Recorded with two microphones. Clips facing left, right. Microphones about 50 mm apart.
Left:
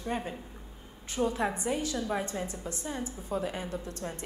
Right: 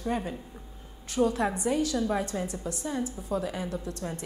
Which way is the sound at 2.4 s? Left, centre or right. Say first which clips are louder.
Right 4 dB; centre.